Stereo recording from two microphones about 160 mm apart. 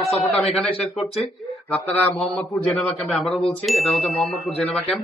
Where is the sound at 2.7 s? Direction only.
Centre (ahead or behind).